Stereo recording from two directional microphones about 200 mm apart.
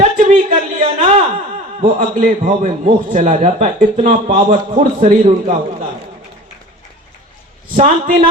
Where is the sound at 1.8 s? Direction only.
40° right (ahead or behind).